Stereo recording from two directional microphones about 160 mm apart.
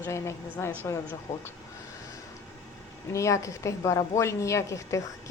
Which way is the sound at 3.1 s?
20° left (ahead or behind).